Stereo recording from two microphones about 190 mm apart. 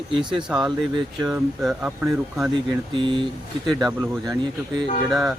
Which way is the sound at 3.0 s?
25° right (ahead or behind).